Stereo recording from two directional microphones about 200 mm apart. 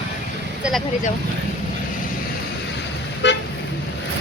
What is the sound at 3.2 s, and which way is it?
Toot, 60° left (ahead or behind).